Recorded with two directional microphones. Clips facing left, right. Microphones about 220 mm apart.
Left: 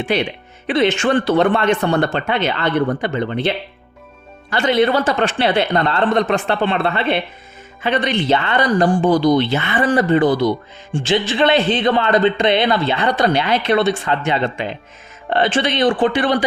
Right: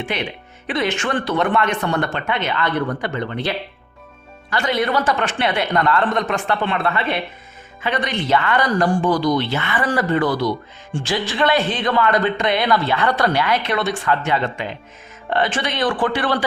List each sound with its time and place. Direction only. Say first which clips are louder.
0.7 s speech: left 6 dB; 25° left (ahead or behind)